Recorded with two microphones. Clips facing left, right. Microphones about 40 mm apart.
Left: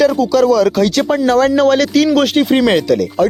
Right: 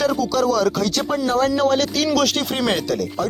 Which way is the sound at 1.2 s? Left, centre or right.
Left.